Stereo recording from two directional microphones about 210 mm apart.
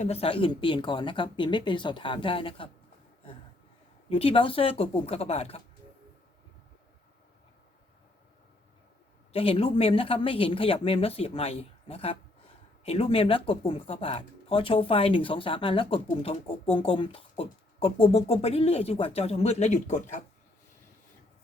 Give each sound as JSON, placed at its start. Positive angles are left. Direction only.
{"t": 0.0, "sound": "speech", "side_deg": 30}
{"t": 4.1, "sound": "speech", "side_deg": 25}
{"t": 9.3, "sound": "speech", "side_deg": 25}